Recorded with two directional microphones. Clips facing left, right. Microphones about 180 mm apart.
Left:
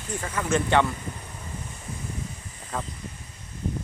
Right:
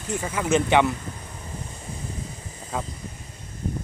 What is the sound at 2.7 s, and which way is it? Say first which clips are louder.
Speech: right 2 dB; 5° right (ahead or behind).